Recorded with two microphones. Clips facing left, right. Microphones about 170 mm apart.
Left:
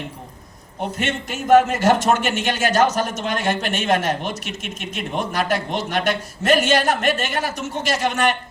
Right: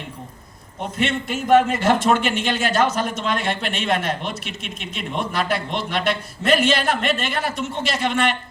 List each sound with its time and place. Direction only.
0.9 s a man's voice: 45° left (ahead or behind)